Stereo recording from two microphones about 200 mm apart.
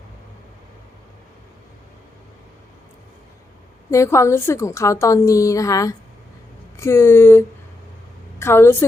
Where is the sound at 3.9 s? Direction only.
15° left (ahead or behind).